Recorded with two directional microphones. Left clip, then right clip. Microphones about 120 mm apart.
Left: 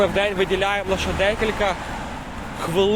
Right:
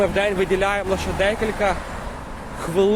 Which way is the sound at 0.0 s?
25° right (ahead or behind).